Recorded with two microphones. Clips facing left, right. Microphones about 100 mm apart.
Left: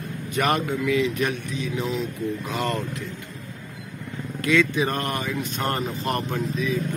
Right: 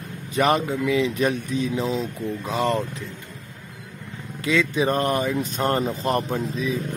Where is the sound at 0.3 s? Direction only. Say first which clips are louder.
Right 3 dB; 30° right (ahead or behind).